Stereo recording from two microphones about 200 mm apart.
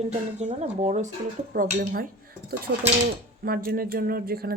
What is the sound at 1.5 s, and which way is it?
Speech, 45° right (ahead or behind).